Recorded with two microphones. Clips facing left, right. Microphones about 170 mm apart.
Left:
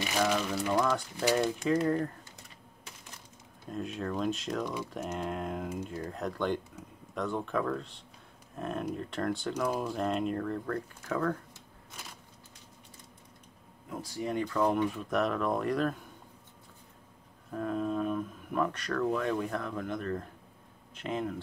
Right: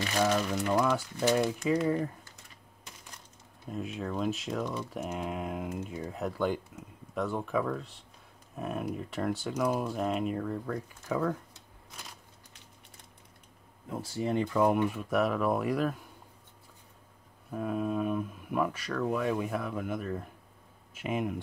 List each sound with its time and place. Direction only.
0.4 s speech: centre (ahead or behind)
3.6 s speech: 5° right (ahead or behind)
14.1 s speech: 25° right (ahead or behind)
14.6 s speech: 10° right (ahead or behind)
17.5 s speech: 5° right (ahead or behind)